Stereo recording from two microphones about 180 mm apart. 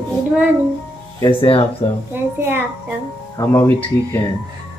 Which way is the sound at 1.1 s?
25° left (ahead or behind).